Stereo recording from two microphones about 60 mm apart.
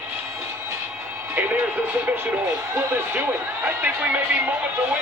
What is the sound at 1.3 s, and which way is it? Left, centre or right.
Speech, right.